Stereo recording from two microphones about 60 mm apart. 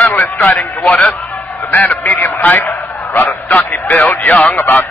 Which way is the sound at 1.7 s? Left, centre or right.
Left.